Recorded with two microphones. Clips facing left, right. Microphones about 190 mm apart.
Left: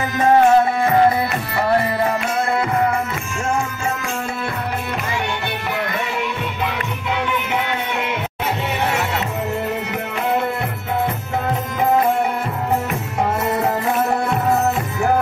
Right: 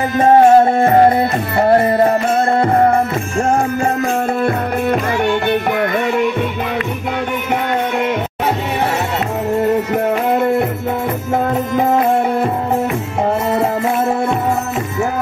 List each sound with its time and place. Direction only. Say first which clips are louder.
0.2 s music: right 4 dB; 50° right (ahead or behind)
5.2 s music: right 10 dB; 50° right (ahead or behind)